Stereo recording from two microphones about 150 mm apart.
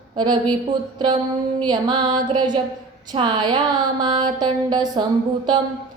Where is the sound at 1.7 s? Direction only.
30° right (ahead or behind).